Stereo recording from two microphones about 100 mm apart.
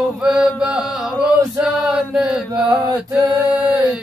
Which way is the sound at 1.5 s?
5° right (ahead or behind).